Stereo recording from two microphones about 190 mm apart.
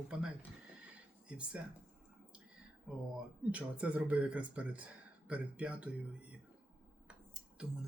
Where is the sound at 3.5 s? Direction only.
5° right (ahead or behind).